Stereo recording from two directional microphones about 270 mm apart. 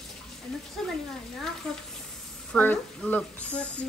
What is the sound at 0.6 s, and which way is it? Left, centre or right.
Speech, centre.